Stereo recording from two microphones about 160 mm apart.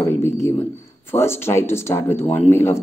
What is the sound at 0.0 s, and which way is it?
A man's voice, 15° left (ahead or behind).